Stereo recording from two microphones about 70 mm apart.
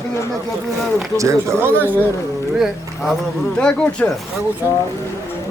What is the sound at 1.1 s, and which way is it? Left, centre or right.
Speech, right.